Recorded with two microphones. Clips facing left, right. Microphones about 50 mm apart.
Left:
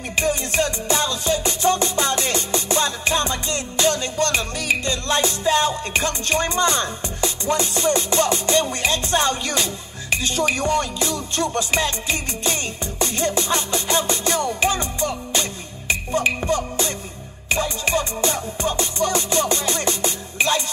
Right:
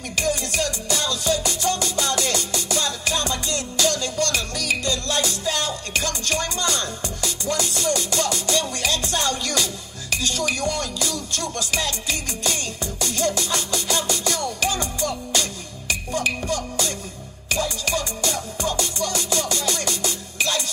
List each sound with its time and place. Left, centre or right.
0.1 s music: left